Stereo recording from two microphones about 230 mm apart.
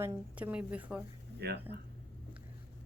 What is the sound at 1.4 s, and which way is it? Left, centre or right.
Speech, right.